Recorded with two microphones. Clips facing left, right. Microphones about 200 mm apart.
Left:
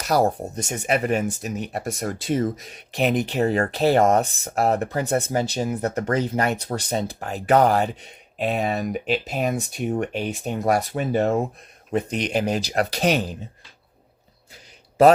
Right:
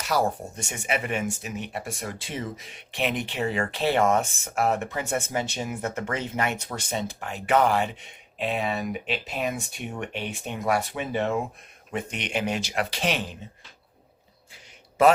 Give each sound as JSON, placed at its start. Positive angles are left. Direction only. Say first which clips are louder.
{"t": 0.0, "sound": "speech", "louder": "left 5 dB", "side_deg": 40}
{"t": 15.0, "sound": "speech", "louder": "left 5 dB", "side_deg": 35}